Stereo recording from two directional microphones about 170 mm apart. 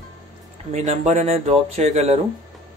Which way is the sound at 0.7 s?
45° right (ahead or behind).